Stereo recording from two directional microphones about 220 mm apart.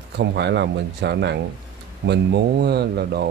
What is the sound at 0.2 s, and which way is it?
Speech, 50° right (ahead or behind).